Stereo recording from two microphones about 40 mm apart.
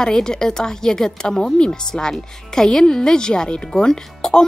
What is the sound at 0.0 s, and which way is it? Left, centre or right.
A woman's voice, centre.